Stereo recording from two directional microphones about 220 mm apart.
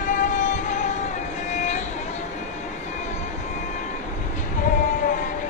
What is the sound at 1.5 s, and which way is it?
Vehicle, 35° left (ahead or behind).